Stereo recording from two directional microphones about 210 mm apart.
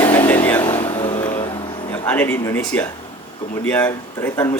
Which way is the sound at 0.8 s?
30° left (ahead or behind).